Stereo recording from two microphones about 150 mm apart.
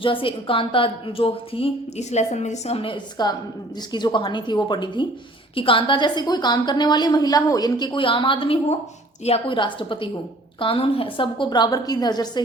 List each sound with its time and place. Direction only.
0.0 s a woman's voice: 35° left (ahead or behind)